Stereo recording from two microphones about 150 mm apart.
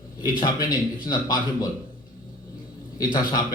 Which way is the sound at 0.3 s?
25° left (ahead or behind).